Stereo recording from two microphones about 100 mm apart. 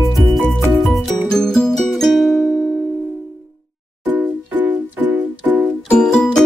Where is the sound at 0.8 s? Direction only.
Centre (ahead or behind).